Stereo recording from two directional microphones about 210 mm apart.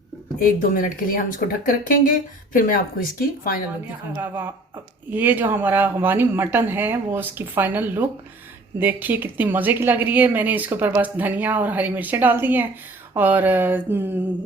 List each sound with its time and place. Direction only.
0.3 s speech: 45° left (ahead or behind)
4.1 s a woman's voice: 10° right (ahead or behind)